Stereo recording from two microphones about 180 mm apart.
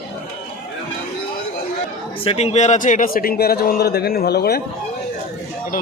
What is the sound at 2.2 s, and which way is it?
Speech, 35° left (ahead or behind).